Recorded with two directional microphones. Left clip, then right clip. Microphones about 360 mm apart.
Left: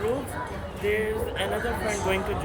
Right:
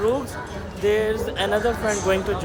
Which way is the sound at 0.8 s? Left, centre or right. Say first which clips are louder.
Right 6 dB; centre.